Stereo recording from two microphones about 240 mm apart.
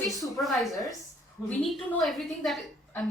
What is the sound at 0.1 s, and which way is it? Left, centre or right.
A woman's voice, centre.